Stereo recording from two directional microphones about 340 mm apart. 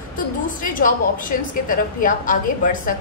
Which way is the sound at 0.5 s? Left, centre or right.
Left.